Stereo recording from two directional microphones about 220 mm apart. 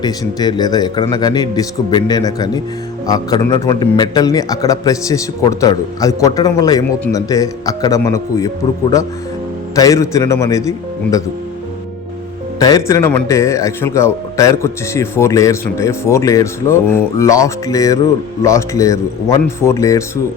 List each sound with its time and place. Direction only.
0.0 s a man's voice: 20° left (ahead or behind)
9.7 s a man's voice: 15° left (ahead or behind)
12.5 s a man's voice: 15° left (ahead or behind)